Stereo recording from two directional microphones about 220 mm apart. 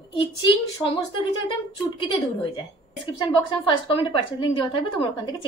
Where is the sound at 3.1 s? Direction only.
20° left (ahead or behind).